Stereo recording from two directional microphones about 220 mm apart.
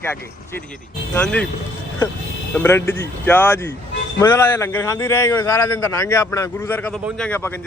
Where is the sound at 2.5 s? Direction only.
10° left (ahead or behind).